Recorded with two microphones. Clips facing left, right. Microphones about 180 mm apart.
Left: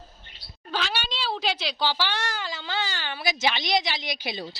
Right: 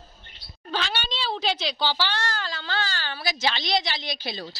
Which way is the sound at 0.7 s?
5° left (ahead or behind).